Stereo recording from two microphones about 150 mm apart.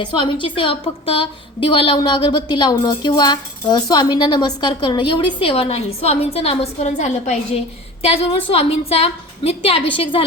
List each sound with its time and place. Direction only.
0.0 s a woman's voice: 35° left (ahead or behind)